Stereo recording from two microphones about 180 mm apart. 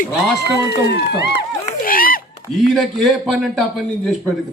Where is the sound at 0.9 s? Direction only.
70° left (ahead or behind).